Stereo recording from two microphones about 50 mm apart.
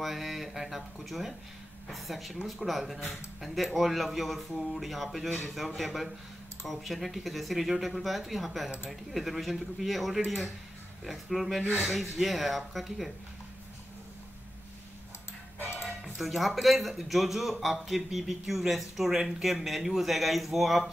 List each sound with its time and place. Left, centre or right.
0.0 s a man's voice: centre
11.6 s speech: left
11.9 s a man's voice: centre
16.0 s a man's voice: centre